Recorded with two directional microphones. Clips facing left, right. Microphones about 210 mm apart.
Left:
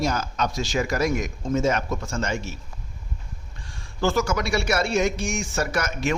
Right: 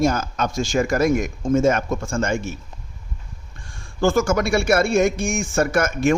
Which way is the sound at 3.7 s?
50° right (ahead or behind).